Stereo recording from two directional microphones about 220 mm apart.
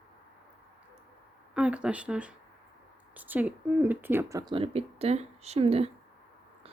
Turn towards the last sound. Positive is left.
turn(degrees=-25)  # may be behind; listen again after turning